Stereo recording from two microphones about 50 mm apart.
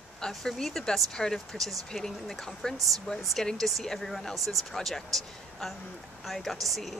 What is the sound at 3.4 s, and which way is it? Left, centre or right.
Speech, centre.